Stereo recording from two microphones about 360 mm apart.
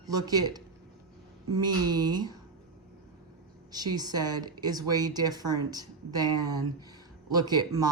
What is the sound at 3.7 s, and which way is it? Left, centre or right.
Speech, centre.